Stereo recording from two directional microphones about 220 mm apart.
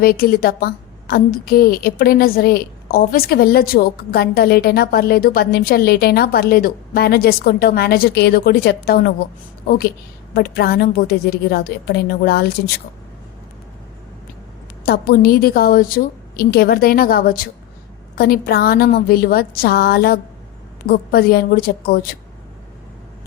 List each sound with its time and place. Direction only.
0.0 s a woman's voice: 45° left (ahead or behind)
14.8 s a woman's voice: 45° left (ahead or behind)